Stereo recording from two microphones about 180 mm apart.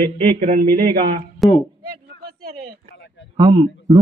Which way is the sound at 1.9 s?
60° right (ahead or behind).